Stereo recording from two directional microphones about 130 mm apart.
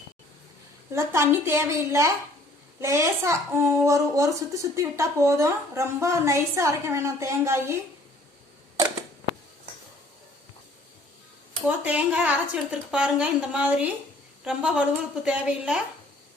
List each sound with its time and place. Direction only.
0.9 s speech: 20° right (ahead or behind)
11.6 s a woman's voice: 10° right (ahead or behind)